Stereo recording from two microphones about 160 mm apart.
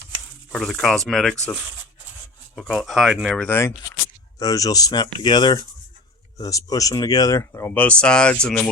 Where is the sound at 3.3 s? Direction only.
10° left (ahead or behind).